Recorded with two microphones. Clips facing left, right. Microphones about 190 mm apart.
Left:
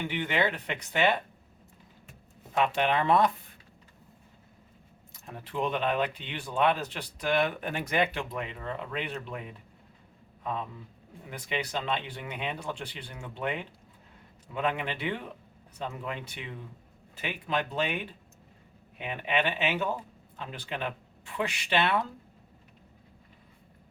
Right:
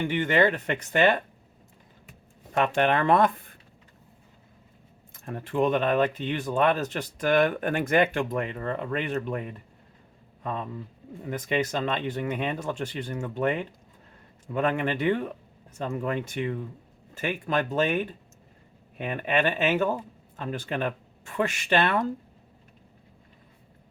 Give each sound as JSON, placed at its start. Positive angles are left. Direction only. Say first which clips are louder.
{"t": 0.1, "sound": "speech", "louder": "right 7 dB", "side_deg": -45}
{"t": 2.6, "sound": "speech", "louder": "right 3 dB", "side_deg": -50}
{"t": 5.1, "sound": "speech", "louder": "right 7 dB", "side_deg": -55}
{"t": 11.3, "sound": "speech", "louder": "right 7 dB", "side_deg": -45}